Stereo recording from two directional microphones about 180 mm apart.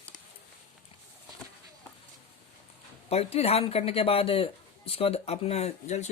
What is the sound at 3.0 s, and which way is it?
Speech, 35° left (ahead or behind).